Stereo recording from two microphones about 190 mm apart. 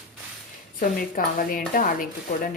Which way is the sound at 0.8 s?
50° left (ahead or behind).